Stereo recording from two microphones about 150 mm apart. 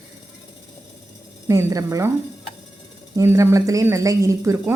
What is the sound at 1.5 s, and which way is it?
Speech, 20° right (ahead or behind).